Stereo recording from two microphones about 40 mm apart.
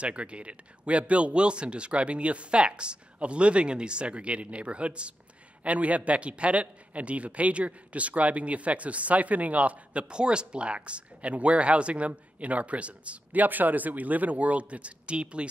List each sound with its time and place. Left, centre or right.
0.0 s speech: right
10.0 s speech: right